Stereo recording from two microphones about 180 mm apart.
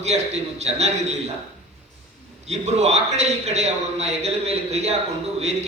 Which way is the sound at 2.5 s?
35° right (ahead or behind).